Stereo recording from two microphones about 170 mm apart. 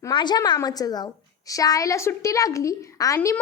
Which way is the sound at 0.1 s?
25° left (ahead or behind).